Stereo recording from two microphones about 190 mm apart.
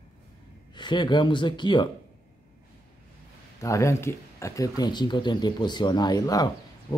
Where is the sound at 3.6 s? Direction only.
15° left (ahead or behind).